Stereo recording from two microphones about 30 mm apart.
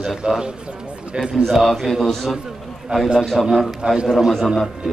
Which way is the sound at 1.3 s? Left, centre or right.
Centre.